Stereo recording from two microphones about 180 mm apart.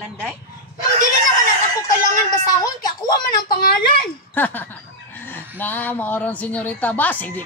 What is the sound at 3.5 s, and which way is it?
Speech, 55° left (ahead or behind).